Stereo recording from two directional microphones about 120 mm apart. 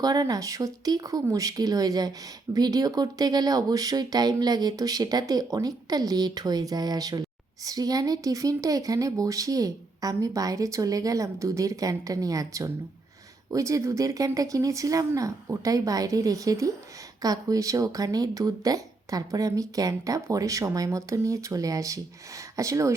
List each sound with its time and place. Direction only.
0.0 s speech: 30° right (ahead or behind)